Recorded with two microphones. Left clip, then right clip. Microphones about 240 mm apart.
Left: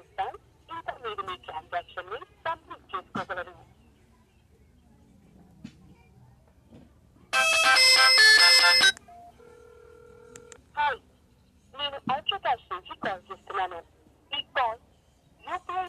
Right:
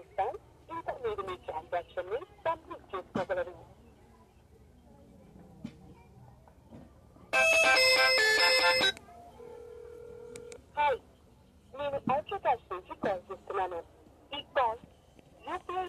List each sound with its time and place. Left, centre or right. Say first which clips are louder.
0.1 s radio: even; centre
7.2 s music: left 3 dB; centre
10.7 s telephone dialing: left 2 dB; centre
11.7 s telephone: left 1 dB; left
15.4 s a sound: left 4 dB; left